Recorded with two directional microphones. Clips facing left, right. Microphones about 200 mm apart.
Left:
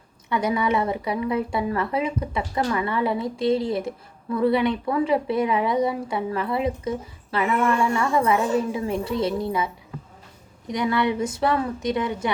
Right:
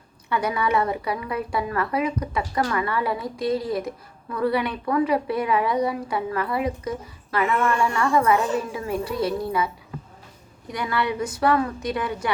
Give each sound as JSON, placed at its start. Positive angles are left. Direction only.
{"t": 0.3, "sound": "speech", "side_deg": 20}
{"t": 10.7, "sound": "speech", "side_deg": 20}